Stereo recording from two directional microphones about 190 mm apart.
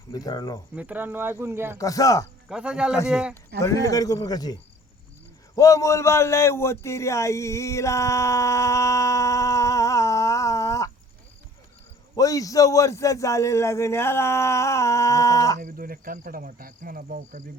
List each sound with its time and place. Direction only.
0.1 s speech: 20° left (ahead or behind)
0.8 s speech: 10° right (ahead or behind)
1.8 s a man's voice: 20° left (ahead or behind)
2.5 s speech: 5° right (ahead or behind)
3.6 s speech: 15° left (ahead or behind)
5.5 s speech: 15° left (ahead or behind)
12.1 s a man's voice: 20° left (ahead or behind)
15.6 s speech: 50° right (ahead or behind)